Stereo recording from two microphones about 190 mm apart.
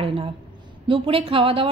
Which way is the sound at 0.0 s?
30° right (ahead or behind).